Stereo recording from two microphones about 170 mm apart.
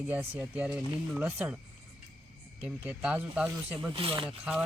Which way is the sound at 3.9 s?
30° right (ahead or behind).